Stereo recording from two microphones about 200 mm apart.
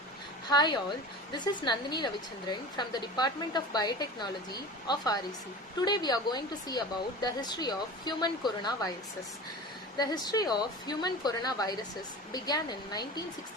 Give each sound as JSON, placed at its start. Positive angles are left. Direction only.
{"t": 0.4, "sound": "a woman's voice", "side_deg": 20}
{"t": 10.0, "sound": "a woman's voice", "side_deg": 20}